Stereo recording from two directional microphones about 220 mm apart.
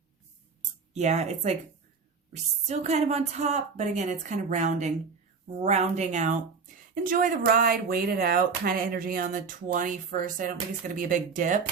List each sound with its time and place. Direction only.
0.9 s speech: 30° right (ahead or behind)